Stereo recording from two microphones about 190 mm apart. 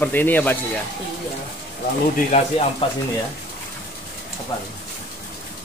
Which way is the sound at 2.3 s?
35° left (ahead or behind).